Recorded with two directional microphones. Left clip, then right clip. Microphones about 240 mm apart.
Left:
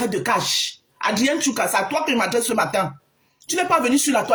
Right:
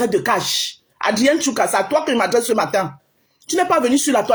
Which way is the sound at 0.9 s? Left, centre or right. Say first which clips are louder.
Right 3 dB; left.